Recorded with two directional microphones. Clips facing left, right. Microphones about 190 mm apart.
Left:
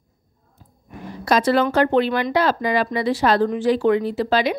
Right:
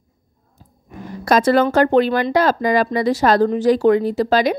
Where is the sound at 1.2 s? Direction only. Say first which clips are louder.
Right 3 dB; 50° right (ahead or behind).